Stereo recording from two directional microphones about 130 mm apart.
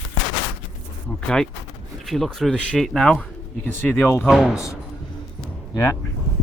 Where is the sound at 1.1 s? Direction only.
5° left (ahead or behind).